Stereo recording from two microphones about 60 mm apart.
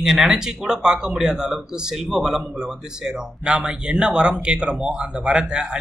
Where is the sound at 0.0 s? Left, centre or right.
Centre.